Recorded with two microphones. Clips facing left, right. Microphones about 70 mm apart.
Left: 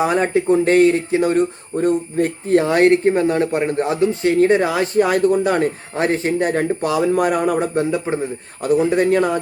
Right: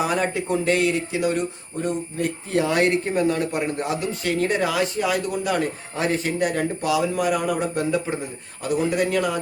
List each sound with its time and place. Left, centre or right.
0.0 s speech: left
4.9 s speech: left